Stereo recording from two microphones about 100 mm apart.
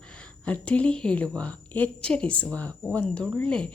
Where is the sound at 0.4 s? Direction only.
15° left (ahead or behind).